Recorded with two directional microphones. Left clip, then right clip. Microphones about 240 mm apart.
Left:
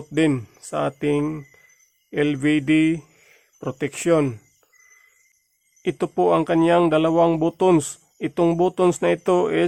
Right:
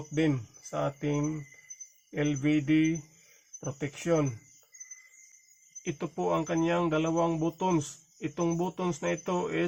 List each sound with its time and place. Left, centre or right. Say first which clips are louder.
0.1 s speech: left 9 dB; left
5.8 s speech: left 12 dB; left